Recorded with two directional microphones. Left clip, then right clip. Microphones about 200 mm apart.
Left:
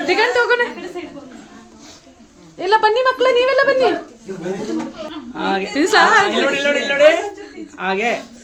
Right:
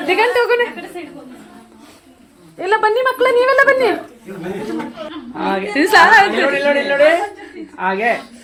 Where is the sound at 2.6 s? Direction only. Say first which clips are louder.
Even; centre (ahead or behind).